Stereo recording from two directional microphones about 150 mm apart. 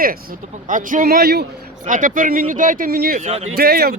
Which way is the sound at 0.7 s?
60° right (ahead or behind).